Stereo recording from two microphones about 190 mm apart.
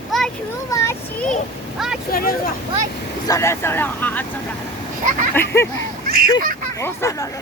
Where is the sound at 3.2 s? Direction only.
15° left (ahead or behind).